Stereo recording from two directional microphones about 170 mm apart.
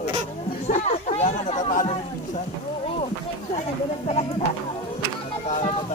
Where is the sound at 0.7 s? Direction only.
50° left (ahead or behind).